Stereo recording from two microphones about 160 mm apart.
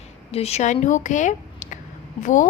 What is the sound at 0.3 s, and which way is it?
A woman's voice, 40° left (ahead or behind).